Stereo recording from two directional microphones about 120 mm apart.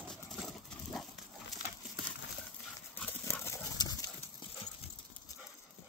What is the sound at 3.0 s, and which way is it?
Dog, 15° left (ahead or behind).